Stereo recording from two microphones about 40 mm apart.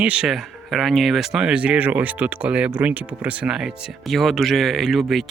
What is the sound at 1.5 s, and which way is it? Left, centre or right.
Speech, right.